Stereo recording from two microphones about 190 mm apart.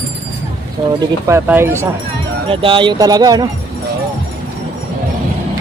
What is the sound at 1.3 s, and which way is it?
Speech, 10° right (ahead or behind).